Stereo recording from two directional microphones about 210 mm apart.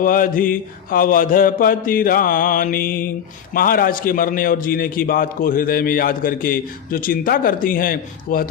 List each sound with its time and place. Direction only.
0.0 s mantra: 40° left (ahead or behind)
3.5 s a man's voice: 45° left (ahead or behind)